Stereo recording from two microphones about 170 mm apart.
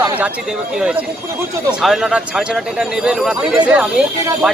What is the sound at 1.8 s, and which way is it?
A man's voice, centre (ahead or behind).